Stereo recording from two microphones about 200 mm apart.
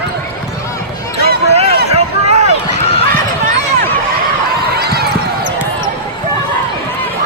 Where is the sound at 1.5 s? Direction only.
30° right (ahead or behind).